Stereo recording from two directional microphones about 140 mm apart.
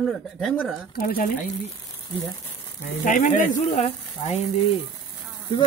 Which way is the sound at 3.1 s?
65° left (ahead or behind).